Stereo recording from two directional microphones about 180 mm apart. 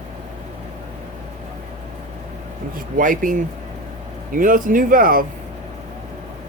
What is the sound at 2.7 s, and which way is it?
Speech, 50° right (ahead or behind).